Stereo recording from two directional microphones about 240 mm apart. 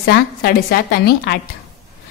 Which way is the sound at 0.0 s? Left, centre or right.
Left.